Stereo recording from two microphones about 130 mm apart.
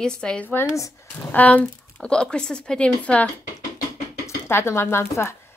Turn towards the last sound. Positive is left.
turn(degrees=20)  # may be behind; listen again after turning